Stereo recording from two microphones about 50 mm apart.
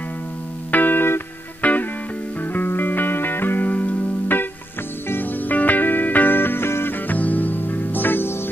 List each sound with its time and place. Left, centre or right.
0.7 s music: left
1.6 s music: left
7.1 s music: left